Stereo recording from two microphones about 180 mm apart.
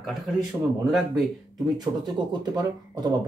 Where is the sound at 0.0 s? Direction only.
Centre (ahead or behind).